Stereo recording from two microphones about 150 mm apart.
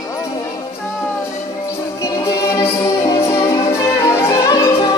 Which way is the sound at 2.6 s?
20° left (ahead or behind).